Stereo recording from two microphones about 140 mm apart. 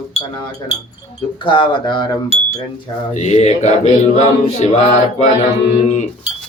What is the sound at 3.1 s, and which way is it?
Mantra, 55° left (ahead or behind).